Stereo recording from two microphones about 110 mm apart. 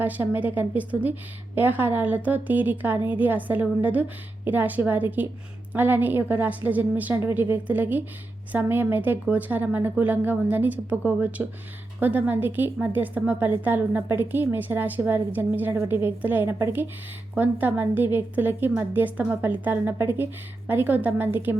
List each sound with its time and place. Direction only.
0.0 s a woman's voice: 15° right (ahead or behind)